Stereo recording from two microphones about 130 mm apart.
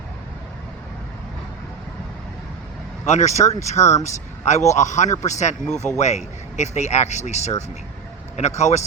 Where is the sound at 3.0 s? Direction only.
65° left (ahead or behind).